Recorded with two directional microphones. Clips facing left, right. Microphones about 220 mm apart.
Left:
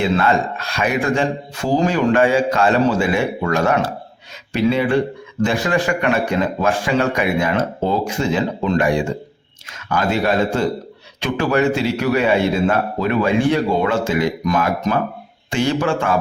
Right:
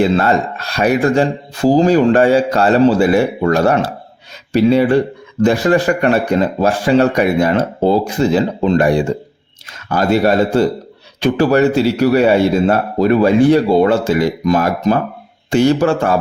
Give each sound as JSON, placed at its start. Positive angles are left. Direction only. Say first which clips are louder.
{"t": 0.0, "sound": "speech", "louder": "right 4 dB", "side_deg": -40}